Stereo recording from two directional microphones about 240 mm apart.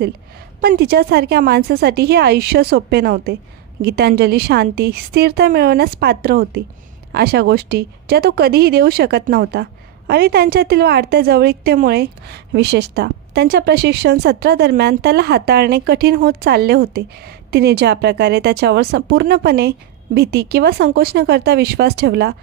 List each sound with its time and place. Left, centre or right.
0.6 s a woman's voice: right